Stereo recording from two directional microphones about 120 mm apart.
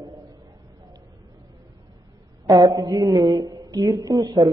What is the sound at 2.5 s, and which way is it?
A man's voice, 30° right (ahead or behind).